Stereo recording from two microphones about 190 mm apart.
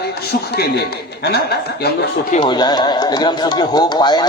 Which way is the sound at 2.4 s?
25° left (ahead or behind).